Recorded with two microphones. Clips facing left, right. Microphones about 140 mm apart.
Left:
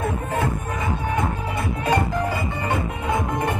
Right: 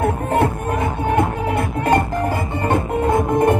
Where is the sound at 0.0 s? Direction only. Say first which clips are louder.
Right 6 dB; 65° right (ahead or behind).